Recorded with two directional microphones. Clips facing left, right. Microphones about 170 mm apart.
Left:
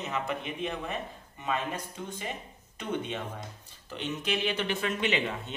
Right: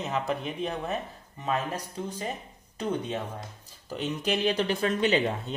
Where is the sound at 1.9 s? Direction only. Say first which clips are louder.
Right 4 dB; 35° right (ahead or behind).